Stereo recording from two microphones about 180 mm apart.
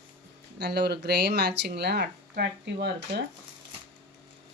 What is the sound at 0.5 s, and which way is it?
Speech, 65° right (ahead or behind).